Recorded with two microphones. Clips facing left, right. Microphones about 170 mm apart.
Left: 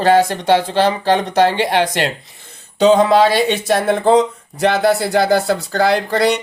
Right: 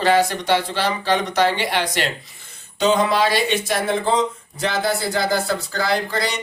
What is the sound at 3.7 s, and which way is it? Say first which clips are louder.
Speech: left 7 dB; 60° left (ahead or behind).